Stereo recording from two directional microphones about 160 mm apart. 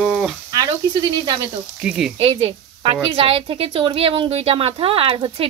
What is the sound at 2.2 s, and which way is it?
A woman's voice, 35° right (ahead or behind).